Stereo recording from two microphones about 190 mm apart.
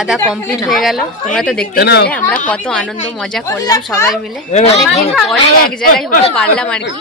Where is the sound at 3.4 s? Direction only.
20° left (ahead or behind).